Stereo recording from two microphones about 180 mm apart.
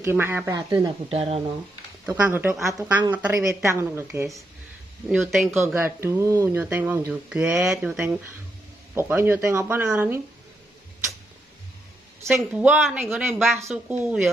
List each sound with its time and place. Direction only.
0.0 s speech: 15° right (ahead or behind)
1.1 s speech: 35° right (ahead or behind)
2.0 s speech: 15° right (ahead or behind)
5.0 s speech: centre (ahead or behind)
5.5 s speech: 15° right (ahead or behind)
12.3 s speech: centre (ahead or behind)